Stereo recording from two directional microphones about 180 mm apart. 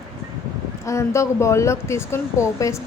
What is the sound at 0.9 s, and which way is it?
A woman's voice, 15° left (ahead or behind).